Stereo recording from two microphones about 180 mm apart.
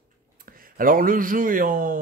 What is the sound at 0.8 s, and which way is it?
Speech, 50° right (ahead or behind).